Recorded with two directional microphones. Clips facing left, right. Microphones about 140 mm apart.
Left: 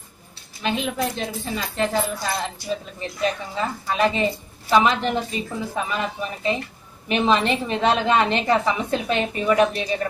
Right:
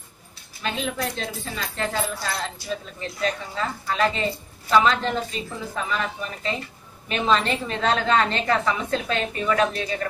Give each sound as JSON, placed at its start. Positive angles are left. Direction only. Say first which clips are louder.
{"t": 0.6, "sound": "a woman's voice", "louder": "left 3 dB", "side_deg": 20}